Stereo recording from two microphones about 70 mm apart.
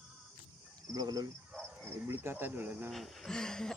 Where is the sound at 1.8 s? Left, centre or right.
Right.